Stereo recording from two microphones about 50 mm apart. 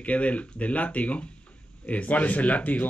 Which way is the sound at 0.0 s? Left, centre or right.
Left.